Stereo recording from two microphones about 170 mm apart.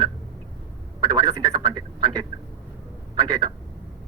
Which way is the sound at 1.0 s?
25° right (ahead or behind).